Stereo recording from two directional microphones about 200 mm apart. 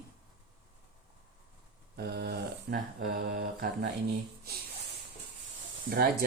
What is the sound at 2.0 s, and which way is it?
Mantra, 55° right (ahead or behind).